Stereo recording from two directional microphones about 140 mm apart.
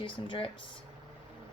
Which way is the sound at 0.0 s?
35° left (ahead or behind).